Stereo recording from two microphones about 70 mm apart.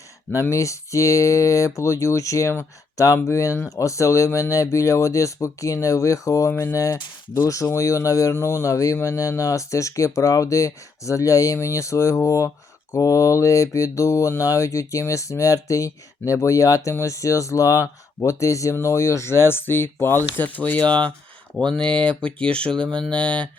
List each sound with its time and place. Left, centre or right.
0.5 s mantra: left
8.3 s mantra: left
20.3 s speech: left